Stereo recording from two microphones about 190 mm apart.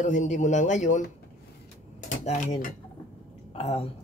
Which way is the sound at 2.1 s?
40° left (ahead or behind).